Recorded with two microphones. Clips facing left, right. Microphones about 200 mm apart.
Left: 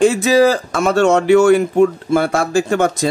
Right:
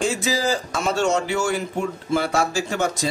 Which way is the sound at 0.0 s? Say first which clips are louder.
Left 11 dB; 60° left (ahead or behind).